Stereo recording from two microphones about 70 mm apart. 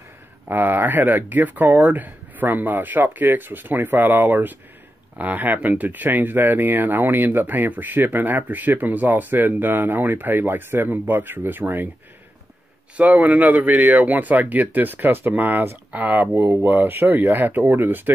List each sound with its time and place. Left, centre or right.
0.5 s speech: right
12.9 s speech: right